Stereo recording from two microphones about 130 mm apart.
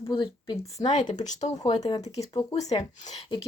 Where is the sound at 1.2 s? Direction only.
65° left (ahead or behind).